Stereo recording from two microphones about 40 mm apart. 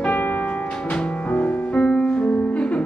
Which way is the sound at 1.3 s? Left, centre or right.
Left.